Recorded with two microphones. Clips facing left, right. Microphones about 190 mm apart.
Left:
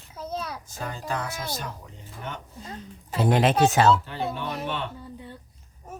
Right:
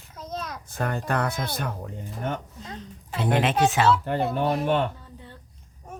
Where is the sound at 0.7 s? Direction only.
60° right (ahead or behind).